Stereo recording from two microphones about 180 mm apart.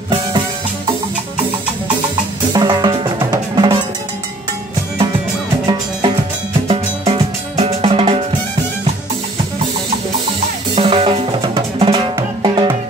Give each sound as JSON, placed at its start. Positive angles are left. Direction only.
{"t": 2.5, "sound": "music", "side_deg": -25}
{"t": 6.7, "sound": "music", "side_deg": -35}
{"t": 10.7, "sound": "drum", "side_deg": -30}